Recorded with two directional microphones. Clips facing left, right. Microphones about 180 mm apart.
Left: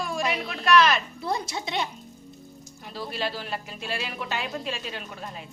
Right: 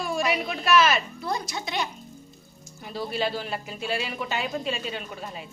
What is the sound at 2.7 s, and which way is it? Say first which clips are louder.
Speech: right 4 dB; centre (ahead or behind).